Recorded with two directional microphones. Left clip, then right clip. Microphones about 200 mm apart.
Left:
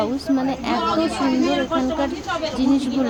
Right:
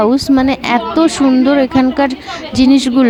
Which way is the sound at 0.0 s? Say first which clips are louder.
Right 10 dB; 45° right (ahead or behind).